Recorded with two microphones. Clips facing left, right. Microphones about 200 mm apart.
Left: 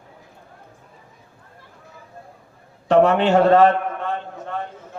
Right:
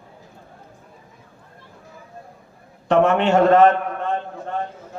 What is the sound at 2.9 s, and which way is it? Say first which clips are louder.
Speech: left 1 dB; 35° left (ahead or behind).